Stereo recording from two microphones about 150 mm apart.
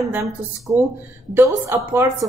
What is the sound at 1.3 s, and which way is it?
Speech, 15° right (ahead or behind).